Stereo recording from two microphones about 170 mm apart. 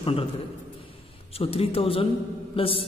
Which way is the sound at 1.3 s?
35° left (ahead or behind).